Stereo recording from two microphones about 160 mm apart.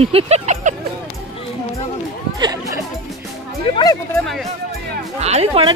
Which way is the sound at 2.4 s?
20° right (ahead or behind).